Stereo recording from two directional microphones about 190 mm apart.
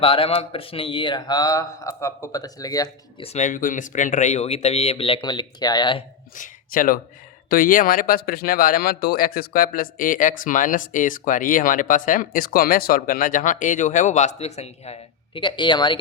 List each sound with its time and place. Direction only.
0.0 s speech: 30° left (ahead or behind)
3.2 s speech: 40° left (ahead or behind); by 6.0 s 20° left (ahead or behind)
6.3 s speech: 45° left (ahead or behind); by 16.0 s 25° left (ahead or behind)